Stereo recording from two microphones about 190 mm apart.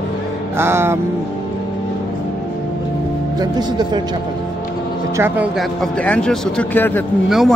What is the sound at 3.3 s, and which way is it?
Speech, 20° right (ahead or behind).